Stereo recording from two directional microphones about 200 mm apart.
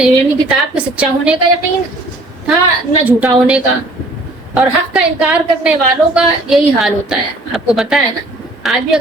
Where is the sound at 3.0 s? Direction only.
5° right (ahead or behind).